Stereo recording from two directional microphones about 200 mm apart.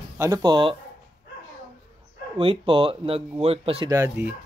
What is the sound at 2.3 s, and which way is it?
Speech, 25° right (ahead or behind).